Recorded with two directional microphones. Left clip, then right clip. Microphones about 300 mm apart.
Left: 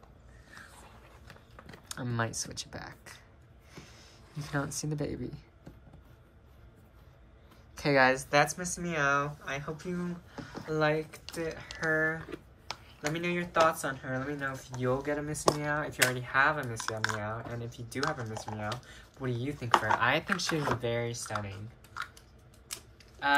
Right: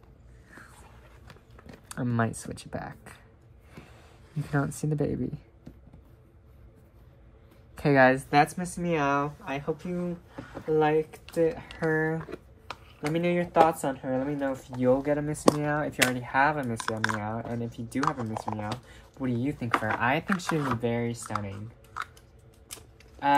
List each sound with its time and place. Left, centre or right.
1.2 s typing: centre
3.7 s speech: centre
7.7 s speech: centre
11.9 s speech: centre
16.9 s speech: right
17.2 s speech: centre